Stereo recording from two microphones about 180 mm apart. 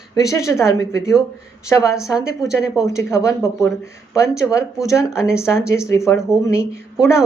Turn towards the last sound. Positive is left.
turn(degrees=15)  # may be behind; listen again after turning